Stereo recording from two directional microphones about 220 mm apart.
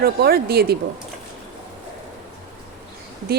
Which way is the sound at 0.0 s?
45° right (ahead or behind).